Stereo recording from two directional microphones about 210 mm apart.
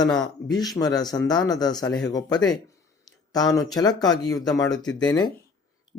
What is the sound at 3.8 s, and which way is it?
Speech, 20° left (ahead or behind).